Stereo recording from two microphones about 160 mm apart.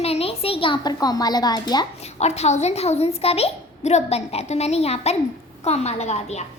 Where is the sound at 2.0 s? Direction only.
40° left (ahead or behind).